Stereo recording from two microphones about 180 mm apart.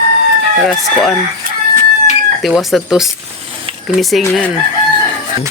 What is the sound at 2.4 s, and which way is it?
Speech, centre (ahead or behind).